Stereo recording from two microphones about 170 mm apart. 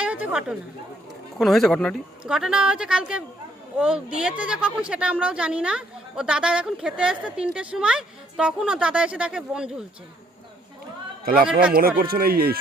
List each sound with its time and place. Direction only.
0.0 s chatter: 10° right (ahead or behind)
1.4 s speech: centre (ahead or behind)
11.7 s speech: 60° right (ahead or behind)